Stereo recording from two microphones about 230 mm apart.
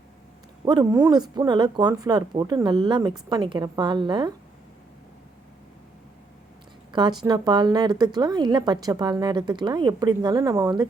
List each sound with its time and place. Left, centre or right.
0.6 s a woman's voice: centre
6.9 s a woman's voice: centre